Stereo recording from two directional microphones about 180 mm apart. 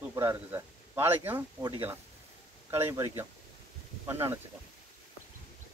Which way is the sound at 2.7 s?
15° right (ahead or behind).